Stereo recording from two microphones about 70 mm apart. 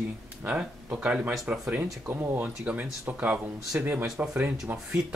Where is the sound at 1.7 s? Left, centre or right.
Right.